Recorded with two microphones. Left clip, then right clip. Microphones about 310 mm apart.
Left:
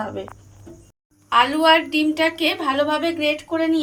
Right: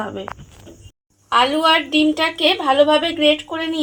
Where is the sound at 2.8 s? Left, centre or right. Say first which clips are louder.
Right 5 dB; centre.